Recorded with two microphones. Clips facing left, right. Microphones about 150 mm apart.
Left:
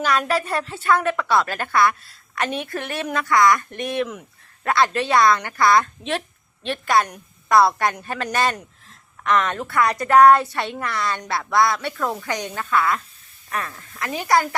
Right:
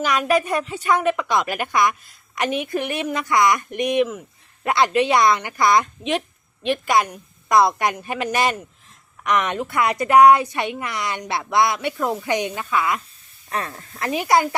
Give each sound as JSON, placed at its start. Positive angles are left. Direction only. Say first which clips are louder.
{"t": 0.0, "sound": "a woman's voice", "louder": "right 2 dB", "side_deg": -10}
{"t": 13.5, "sound": "speech", "louder": "right 2 dB", "side_deg": -30}
{"t": 14.1, "sound": "a woman's voice", "louder": "right 1 dB", "side_deg": -20}